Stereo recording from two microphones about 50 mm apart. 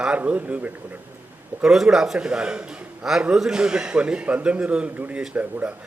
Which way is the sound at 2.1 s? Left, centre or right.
Centre.